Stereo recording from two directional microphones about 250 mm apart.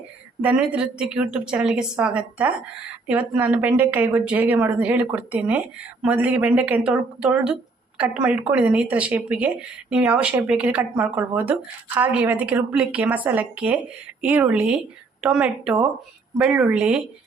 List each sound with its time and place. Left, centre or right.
0.4 s a woman's voice: centre